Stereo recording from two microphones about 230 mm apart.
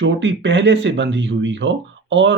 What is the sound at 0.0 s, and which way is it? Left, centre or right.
Speech, right.